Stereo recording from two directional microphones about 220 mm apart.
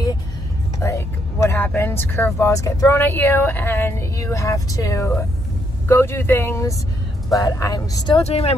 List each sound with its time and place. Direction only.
0.7 s speech: 15° left (ahead or behind)
8.2 s speech: 30° left (ahead or behind)